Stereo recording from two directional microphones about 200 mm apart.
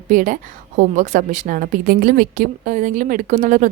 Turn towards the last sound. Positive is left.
turn(degrees=-40)  # may be behind; listen again after turning